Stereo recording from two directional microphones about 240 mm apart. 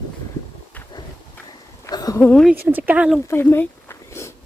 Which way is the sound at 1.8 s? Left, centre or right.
Centre.